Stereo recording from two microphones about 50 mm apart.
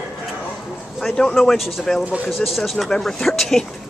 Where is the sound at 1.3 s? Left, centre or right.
Centre.